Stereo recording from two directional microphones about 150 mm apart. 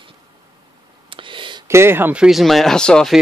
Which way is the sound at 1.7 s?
15° right (ahead or behind).